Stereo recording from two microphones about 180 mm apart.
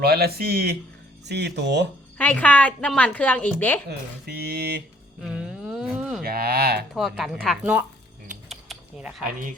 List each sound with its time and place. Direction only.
0.0 s speech: 60° right (ahead or behind)
2.1 s a woman's voice: 10° left (ahead or behind)
3.8 s speech: 60° right (ahead or behind)
5.2 s a sound: 5° right (ahead or behind)
6.2 s speech: 60° right (ahead or behind)
6.9 s speech: centre (ahead or behind)
8.4 s a sound: centre (ahead or behind)
9.2 s speech: 45° right (ahead or behind)